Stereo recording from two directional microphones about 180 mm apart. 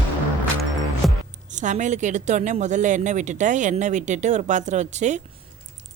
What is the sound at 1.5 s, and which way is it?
A woman's voice, 40° right (ahead or behind).